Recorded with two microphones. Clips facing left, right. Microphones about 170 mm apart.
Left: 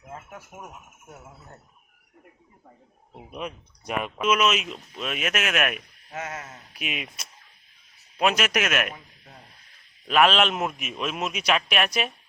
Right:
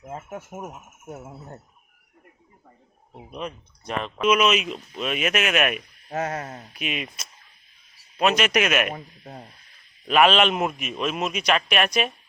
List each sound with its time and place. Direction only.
0.1 s speech: 25° right (ahead or behind)
3.2 s speech: 5° left (ahead or behind)
6.1 s speech: 40° right (ahead or behind)
6.7 s speech: 5° left (ahead or behind)
8.9 s speech: 45° right (ahead or behind)
10.1 s speech: centre (ahead or behind)